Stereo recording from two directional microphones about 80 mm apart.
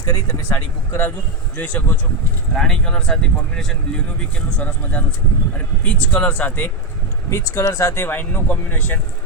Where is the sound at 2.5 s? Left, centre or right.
Centre.